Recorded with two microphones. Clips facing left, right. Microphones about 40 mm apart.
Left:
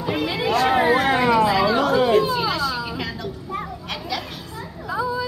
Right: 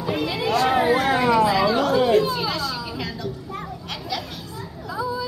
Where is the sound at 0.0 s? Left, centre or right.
Centre.